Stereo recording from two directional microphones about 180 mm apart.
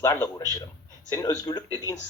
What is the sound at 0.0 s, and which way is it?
A woman's voice, 15° left (ahead or behind).